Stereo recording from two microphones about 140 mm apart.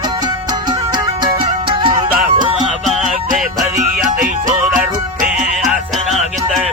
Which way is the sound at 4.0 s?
70° right (ahead or behind).